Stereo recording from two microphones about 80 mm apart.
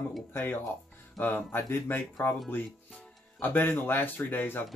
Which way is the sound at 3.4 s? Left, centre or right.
Left.